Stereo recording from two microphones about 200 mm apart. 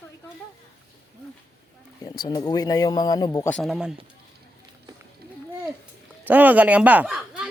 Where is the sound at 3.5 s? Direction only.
Centre (ahead or behind).